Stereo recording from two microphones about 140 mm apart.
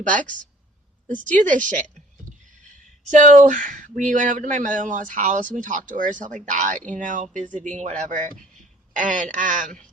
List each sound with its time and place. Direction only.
0.0 s speech: 65° right (ahead or behind)
3.0 s speech: 60° right (ahead or behind)